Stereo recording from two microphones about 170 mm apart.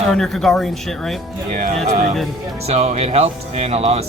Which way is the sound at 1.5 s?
45° right (ahead or behind).